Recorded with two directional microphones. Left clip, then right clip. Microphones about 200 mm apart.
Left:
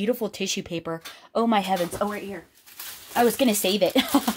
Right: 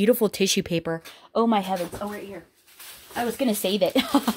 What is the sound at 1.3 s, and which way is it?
Speech, 10° right (ahead or behind).